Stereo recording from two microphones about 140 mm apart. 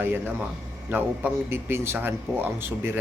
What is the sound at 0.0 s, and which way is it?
A man's voice, 15° right (ahead or behind).